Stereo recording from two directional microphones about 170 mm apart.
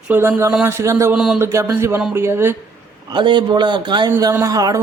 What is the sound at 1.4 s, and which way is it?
Speech, 15° right (ahead or behind).